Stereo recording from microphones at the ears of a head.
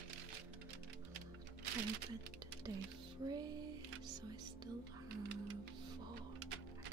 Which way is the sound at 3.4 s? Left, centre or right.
Right.